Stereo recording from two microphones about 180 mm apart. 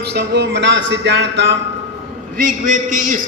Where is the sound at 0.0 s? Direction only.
65° right (ahead or behind).